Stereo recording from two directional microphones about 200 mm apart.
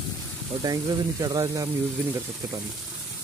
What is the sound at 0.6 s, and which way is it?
Speech, 20° right (ahead or behind).